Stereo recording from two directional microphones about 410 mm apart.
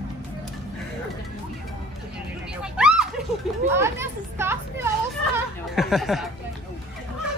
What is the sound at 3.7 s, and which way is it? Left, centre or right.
Speech, centre.